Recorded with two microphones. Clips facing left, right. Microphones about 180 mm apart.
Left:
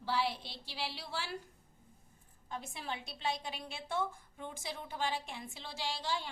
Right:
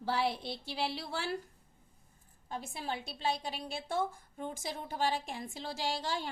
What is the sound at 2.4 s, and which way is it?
A woman's voice, 35° right (ahead or behind).